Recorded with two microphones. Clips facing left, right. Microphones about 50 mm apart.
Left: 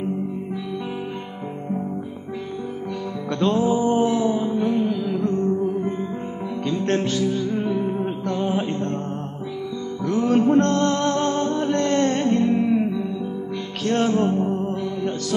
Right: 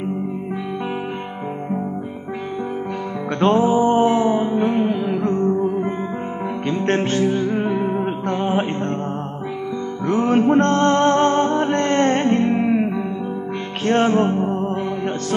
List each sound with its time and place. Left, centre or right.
3.3 s music: right
6.7 s music: right
10.0 s music: right
12.5 s music: centre
13.8 s music: right